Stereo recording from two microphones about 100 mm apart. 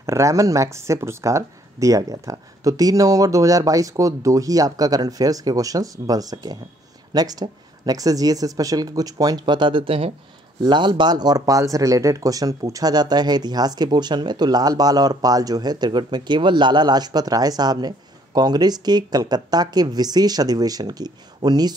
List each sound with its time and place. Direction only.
0.0 s speech: 30° right (ahead or behind); by 10.1 s 70° right (ahead or behind)
10.6 s speech: 50° right (ahead or behind)